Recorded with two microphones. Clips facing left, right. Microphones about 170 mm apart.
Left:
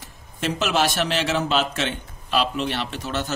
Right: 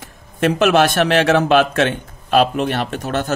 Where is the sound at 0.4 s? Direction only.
60° right (ahead or behind).